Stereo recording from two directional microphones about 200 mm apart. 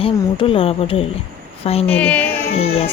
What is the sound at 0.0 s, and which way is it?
Speech, 25° left (ahead or behind).